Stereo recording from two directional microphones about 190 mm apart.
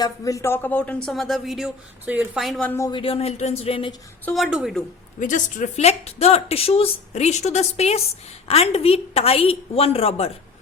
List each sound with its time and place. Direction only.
0.0 s speech: 15° left (ahead or behind)
3.0 s speech: 30° left (ahead or behind)
4.3 s speech: centre (ahead or behind)
5.2 s speech: 40° left (ahead or behind)